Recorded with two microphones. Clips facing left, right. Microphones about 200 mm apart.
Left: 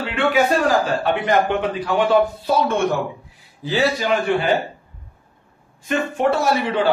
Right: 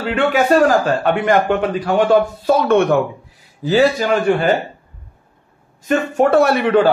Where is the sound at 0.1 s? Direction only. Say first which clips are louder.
Right 4 dB; 40° right (ahead or behind); by 3.0 s 60° right (ahead or behind).